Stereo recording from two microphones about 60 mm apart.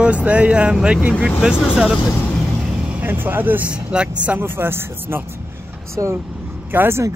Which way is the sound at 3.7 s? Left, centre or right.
Centre.